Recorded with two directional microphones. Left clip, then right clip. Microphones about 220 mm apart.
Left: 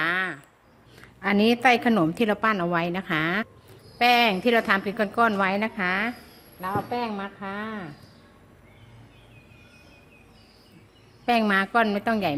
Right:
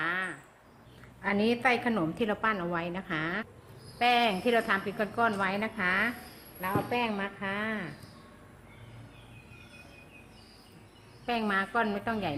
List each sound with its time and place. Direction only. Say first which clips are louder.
0.0 s a sound: left 7 dB; 45° left (ahead or behind)
1.2 s a woman's voice: left 7 dB; 50° left (ahead or behind)
6.6 s speech: left 2 dB; 25° left (ahead or behind)
11.3 s a woman's voice: left 8 dB; 45° left (ahead or behind)